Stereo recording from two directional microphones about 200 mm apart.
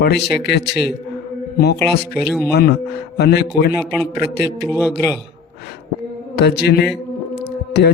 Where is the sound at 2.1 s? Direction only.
Centre (ahead or behind).